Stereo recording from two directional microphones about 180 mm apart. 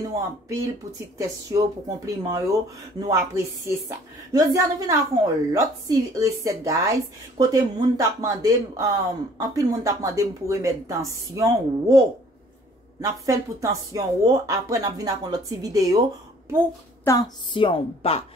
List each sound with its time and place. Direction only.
0.1 s a woman's voice: 15° right (ahead or behind)
13.0 s speech: 15° right (ahead or behind)
17.0 s a woman's voice: 20° left (ahead or behind)